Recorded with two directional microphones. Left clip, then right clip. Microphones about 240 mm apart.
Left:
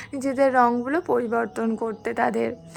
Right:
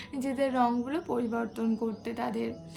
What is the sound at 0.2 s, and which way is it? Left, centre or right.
A woman's voice, centre.